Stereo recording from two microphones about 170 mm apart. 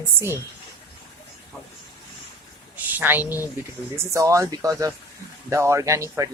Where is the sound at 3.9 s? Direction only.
15° right (ahead or behind).